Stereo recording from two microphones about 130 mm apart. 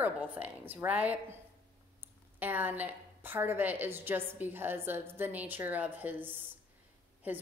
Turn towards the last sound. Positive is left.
turn(degrees=-15)  # may be behind; listen again after turning